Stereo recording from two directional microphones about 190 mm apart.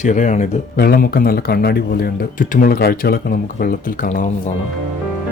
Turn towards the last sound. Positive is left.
turn(degrees=45)  # may be behind; listen again after turning